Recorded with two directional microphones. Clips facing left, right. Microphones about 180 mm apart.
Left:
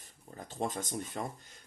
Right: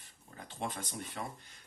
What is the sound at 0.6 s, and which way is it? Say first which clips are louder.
Speech: left 4 dB; 45° left (ahead or behind).